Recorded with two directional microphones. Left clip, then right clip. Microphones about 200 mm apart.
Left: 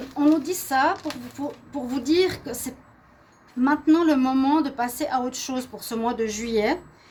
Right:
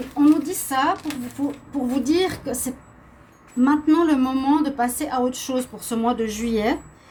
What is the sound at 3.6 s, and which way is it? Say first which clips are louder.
A woman's voice: right 1 dB; 45° left (ahead or behind).